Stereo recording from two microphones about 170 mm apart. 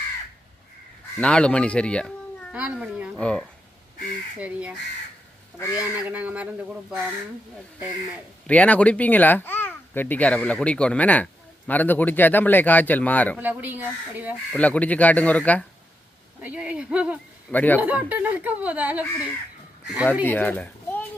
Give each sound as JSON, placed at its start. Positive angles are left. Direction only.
{"t": 1.2, "sound": "a child's voice", "side_deg": 5}
{"t": 2.5, "sound": "speech", "side_deg": -5}
{"t": 3.2, "sound": "a child's voice", "side_deg": 5}
{"t": 4.4, "sound": "speech", "side_deg": -10}
{"t": 5.5, "sound": "speech", "side_deg": 20}
{"t": 6.0, "sound": "speech", "side_deg": -10}
{"t": 8.4, "sound": "a child's voice", "side_deg": 10}
{"t": 13.4, "sound": "speech", "side_deg": -10}
{"t": 14.5, "sound": "a child's voice", "side_deg": 10}
{"t": 16.4, "sound": "speech", "side_deg": -10}
{"t": 17.5, "sound": "a child's voice", "side_deg": 10}
{"t": 17.7, "sound": "speech", "side_deg": -10}
{"t": 20.2, "sound": "a child's voice", "side_deg": 10}